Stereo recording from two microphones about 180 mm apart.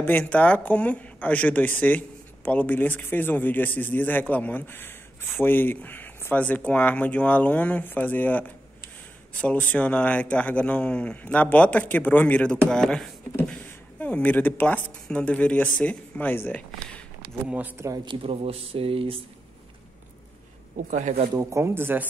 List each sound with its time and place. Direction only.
0.0 s speech: 10° left (ahead or behind)
17.5 s speech: 10° right (ahead or behind); by 19.2 s 30° right (ahead or behind)
20.9 s speech: 40° right (ahead or behind)
21.4 s speech: 15° right (ahead or behind)